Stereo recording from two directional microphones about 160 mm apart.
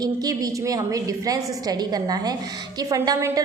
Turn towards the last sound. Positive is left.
turn(degrees=-20)  # may be behind; listen again after turning